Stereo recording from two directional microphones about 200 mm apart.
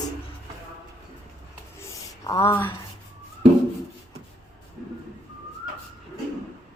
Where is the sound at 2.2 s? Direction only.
15° left (ahead or behind).